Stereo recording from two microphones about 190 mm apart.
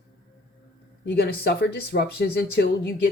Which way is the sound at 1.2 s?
55° left (ahead or behind).